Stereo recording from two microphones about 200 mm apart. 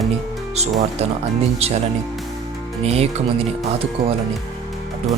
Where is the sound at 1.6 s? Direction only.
30° right (ahead or behind).